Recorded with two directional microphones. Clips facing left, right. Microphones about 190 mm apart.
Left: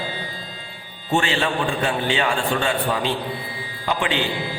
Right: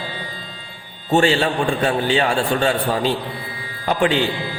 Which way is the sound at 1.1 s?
40° right (ahead or behind).